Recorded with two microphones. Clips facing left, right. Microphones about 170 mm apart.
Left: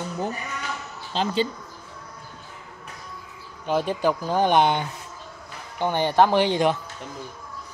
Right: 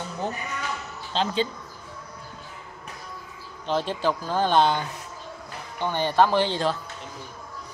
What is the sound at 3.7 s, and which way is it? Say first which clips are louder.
Speech: left 2 dB; 10° left (ahead or behind).